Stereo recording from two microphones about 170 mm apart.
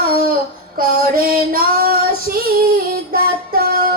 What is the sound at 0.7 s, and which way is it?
Female singing, 60° right (ahead or behind).